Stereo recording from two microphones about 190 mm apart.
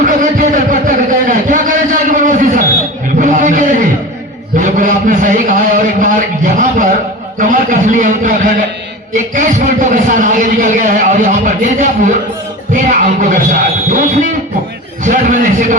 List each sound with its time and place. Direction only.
0.0 s a sound: 45° right (ahead or behind)
4.5 s a man's voice: 45° right (ahead or behind)
15.0 s a man's voice: 40° right (ahead or behind)